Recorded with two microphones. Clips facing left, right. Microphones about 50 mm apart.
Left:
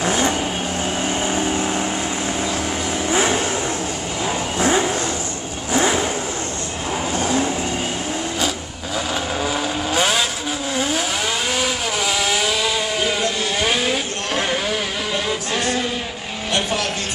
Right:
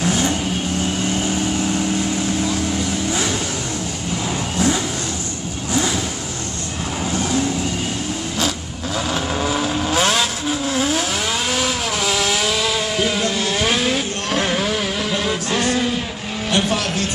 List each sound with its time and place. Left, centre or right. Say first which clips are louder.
0.0 s vehicle: even; centre
4.6 s vehicle: left 2 dB; left
7.2 s vehicle: even; centre
9.4 s vehicle: right 2 dB; centre
15.2 s music: right 2 dB; centre